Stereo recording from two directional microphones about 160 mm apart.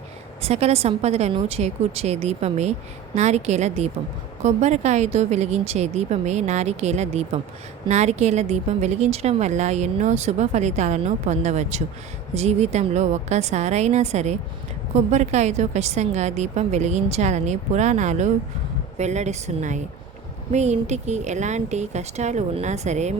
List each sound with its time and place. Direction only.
0.4 s a woman's voice: 40° right (ahead or behind)